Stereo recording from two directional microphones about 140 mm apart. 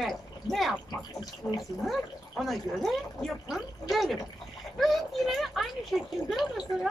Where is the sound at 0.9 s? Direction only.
30° left (ahead or behind).